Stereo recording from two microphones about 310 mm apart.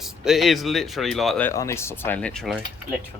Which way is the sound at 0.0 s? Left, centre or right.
Centre.